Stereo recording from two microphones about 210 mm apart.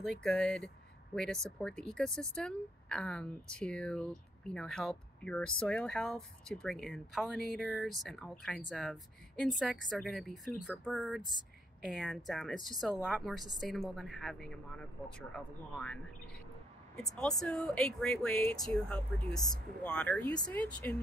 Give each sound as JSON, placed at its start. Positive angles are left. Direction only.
{"t": 0.0, "sound": "a woman's voice", "side_deg": 5}
{"t": 17.1, "sound": "a woman's voice", "side_deg": 0}